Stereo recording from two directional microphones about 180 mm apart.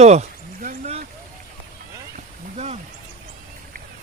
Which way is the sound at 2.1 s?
35° right (ahead or behind).